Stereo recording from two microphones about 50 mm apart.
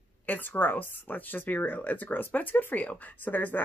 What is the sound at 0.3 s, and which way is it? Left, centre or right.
Speech, left.